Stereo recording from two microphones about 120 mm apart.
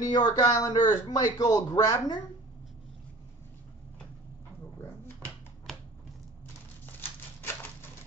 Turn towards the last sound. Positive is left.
turn(degrees=15)  # may be behind; listen again after turning